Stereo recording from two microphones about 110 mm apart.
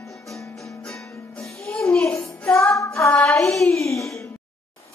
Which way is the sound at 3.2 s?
25° left (ahead or behind).